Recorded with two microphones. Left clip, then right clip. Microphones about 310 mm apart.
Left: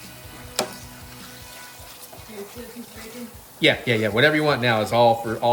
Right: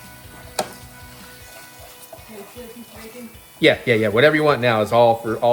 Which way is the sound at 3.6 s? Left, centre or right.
Centre.